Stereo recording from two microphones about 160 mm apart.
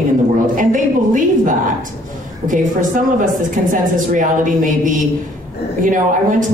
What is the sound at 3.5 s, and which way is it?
Speech, 55° right (ahead or behind).